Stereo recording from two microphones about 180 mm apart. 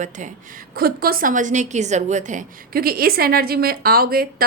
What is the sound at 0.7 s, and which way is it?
A woman's voice, 55° right (ahead or behind).